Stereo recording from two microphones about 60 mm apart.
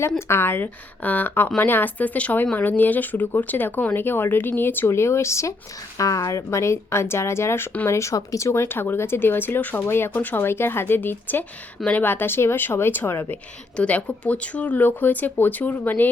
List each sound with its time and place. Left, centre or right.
0.2 s speech: left
4.9 s a woman's voice: left
6.0 s a woman's voice: left
7.9 s speech: left
8.6 s speech: left
10.1 s speech: left
13.7 s speech: left